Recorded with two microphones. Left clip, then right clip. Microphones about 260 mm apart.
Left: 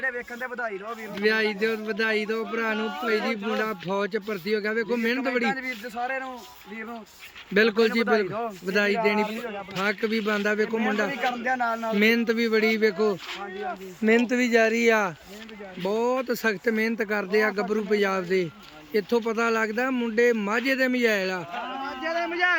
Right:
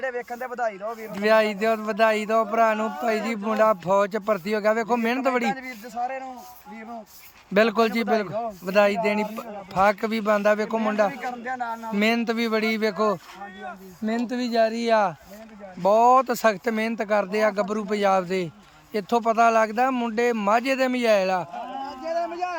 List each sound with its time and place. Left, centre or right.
0.0 s speech: centre
7.5 s speech: centre
11.1 s speech: left
11.9 s speech: centre
14.0 s speech: centre
22.0 s a sound: centre